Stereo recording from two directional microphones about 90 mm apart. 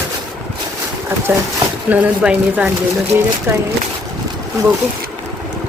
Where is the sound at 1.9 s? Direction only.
15° right (ahead or behind).